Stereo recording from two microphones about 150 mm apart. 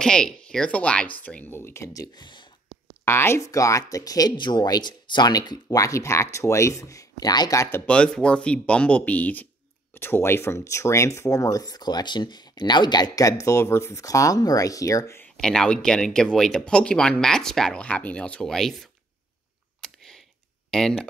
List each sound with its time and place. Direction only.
0.0 s speech: 5° left (ahead or behind); by 2.5 s 30° left (ahead or behind)
3.1 s speech: 15° left (ahead or behind)
7.8 s speech: 5° left (ahead or behind)
15.2 s speech: 5° left (ahead or behind)
19.8 s a sound: 5° left (ahead or behind)
20.7 s speech: 5° left (ahead or behind)